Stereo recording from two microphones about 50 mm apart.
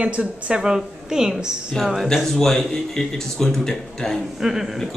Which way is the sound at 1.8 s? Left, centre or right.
Centre.